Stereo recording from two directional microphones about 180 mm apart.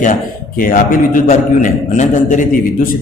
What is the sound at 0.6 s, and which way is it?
A man's voice, 50° left (ahead or behind).